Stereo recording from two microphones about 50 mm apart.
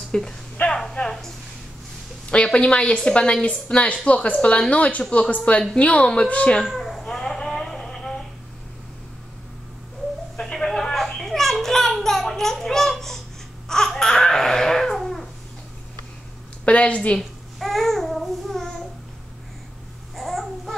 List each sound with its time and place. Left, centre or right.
0.1 s speech: centre
0.7 s a sound: centre
1.0 s speech: centre
2.3 s a woman's voice: centre
6.6 s a sound: centre
10.4 s children playing: centre
13.7 s baby cry: centre
16.6 s a sound: left
17.2 s babbling: centre
20.2 s babbling: centre